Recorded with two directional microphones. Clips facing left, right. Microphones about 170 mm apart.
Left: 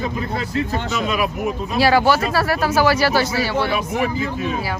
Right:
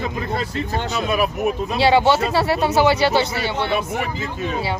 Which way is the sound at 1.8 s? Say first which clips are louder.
Even; 25° right (ahead or behind).